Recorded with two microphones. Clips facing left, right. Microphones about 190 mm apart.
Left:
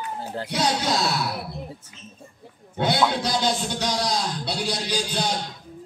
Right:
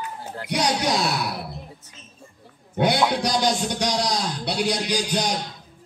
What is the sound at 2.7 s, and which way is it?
A man's voice, 15° right (ahead or behind).